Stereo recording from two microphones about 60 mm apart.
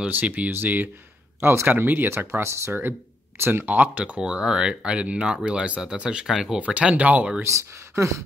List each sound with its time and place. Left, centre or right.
0.1 s speech: right
3.6 s speech: right
4.2 s speech: centre
6.6 s speech: right
7.4 s speech: right